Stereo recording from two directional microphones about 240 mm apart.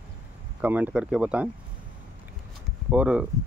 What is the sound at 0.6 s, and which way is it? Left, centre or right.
Speech, centre.